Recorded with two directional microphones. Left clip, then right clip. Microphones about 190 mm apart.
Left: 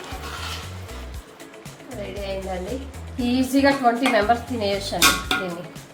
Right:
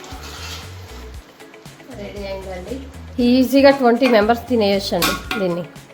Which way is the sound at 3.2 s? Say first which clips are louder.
Right 7 dB; 55° right (ahead or behind).